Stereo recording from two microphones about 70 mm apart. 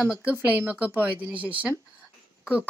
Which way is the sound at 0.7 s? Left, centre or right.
Right.